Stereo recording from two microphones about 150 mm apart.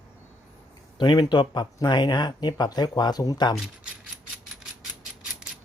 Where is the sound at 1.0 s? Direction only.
30° left (ahead or behind).